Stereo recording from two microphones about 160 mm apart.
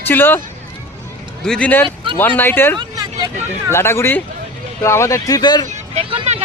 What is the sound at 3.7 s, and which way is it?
Speech, 15° left (ahead or behind).